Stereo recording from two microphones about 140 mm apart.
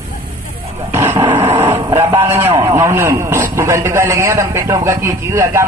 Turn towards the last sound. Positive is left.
turn(degrees=-20)  # may be behind; listen again after turning